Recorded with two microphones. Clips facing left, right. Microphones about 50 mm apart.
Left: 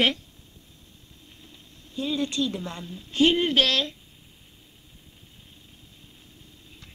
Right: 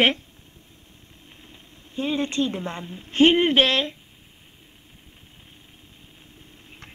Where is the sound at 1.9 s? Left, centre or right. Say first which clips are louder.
Right 2 dB; right.